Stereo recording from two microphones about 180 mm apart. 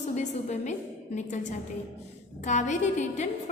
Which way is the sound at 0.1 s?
40° left (ahead or behind).